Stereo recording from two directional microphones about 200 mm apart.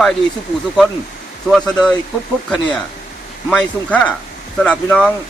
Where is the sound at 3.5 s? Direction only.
5° left (ahead or behind).